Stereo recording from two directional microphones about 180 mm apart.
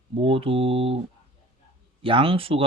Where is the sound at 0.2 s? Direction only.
30° right (ahead or behind).